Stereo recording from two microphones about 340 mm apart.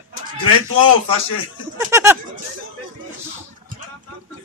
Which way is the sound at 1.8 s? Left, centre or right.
Centre.